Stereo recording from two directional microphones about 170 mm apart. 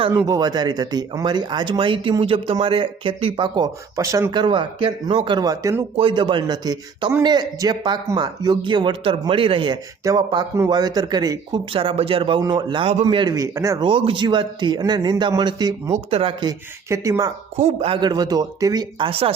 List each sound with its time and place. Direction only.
0.1 s speech: 20° right (ahead or behind)
10.0 s speech: 20° right (ahead or behind)
13.8 s speech: 30° right (ahead or behind)
15.9 s speech: 35° right (ahead or behind); by 17.3 s 20° right (ahead or behind)
17.6 s speech: 35° right (ahead or behind)